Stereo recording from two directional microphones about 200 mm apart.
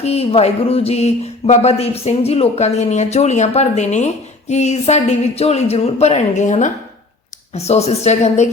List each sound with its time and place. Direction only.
0.0 s speech: 30° left (ahead or behind)